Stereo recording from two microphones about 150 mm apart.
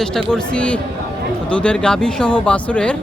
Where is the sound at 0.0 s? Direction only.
5° left (ahead or behind).